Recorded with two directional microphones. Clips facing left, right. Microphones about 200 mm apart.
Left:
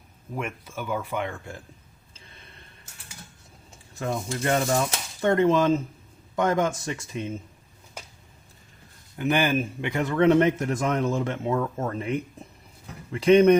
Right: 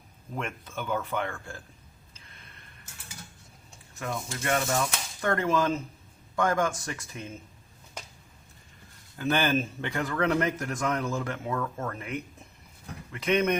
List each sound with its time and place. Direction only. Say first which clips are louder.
0.3 s speech: left 2 dB; 10° left (ahead or behind)
3.9 s speech: left 5 dB; 30° left (ahead or behind)
9.1 s speech: left 3 dB; 15° left (ahead or behind); by 13.6 s 30° left (ahead or behind)